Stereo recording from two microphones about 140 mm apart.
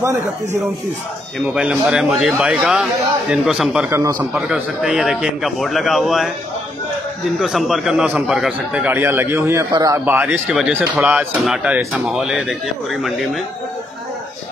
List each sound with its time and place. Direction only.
1.4 s speech: 10° right (ahead or behind)
3.9 s a man's voice: 25° right (ahead or behind)
4.2 s speech: 10° right (ahead or behind)
7.3 s a man's voice: centre (ahead or behind)